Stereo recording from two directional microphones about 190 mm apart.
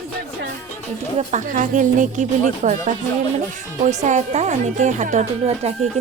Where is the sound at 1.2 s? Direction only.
40° right (ahead or behind).